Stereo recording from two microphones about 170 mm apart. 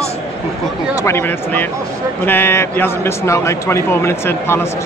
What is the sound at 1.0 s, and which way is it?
A man's voice, 10° left (ahead or behind).